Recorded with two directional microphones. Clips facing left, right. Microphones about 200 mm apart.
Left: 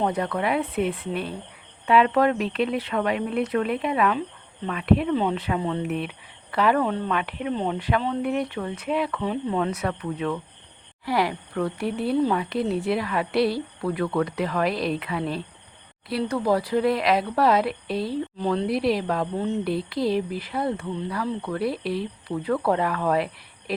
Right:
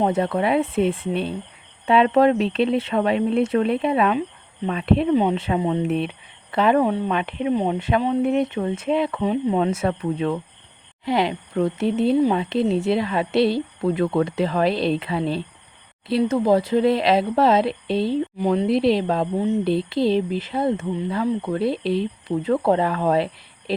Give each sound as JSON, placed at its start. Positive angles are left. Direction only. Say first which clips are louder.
{"t": 0.0, "sound": "speech", "louder": "right 4 dB", "side_deg": -25}
{"t": 7.2, "sound": "speech", "louder": "right 5 dB", "side_deg": -25}
{"t": 7.5, "sound": "speech", "louder": "right 4 dB", "side_deg": -15}
{"t": 12.4, "sound": "speech", "louder": "right 4 dB", "side_deg": -25}
{"t": 18.3, "sound": "speech", "louder": "right 4 dB", "side_deg": -15}